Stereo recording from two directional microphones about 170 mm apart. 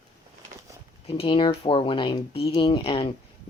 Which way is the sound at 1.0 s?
35° left (ahead or behind).